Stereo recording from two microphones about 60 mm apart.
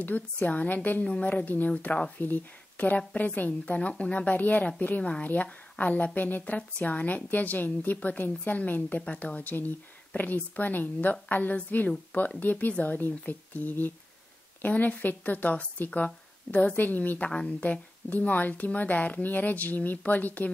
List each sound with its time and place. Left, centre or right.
0.0 s speech: left
17.3 s speech: centre